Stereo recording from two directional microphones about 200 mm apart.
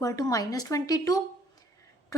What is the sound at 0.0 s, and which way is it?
A woman's voice, 15° left (ahead or behind).